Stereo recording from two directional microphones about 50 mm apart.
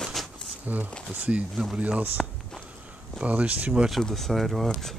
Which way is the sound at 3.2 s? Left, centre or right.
Right.